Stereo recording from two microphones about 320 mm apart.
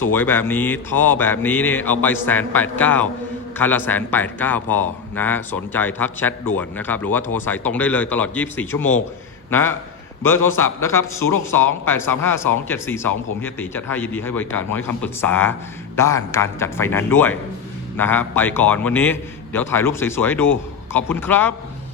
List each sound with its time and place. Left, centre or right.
0.1 s a man's voice: centre